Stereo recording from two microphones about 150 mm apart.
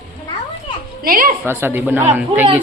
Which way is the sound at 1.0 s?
75° right (ahead or behind).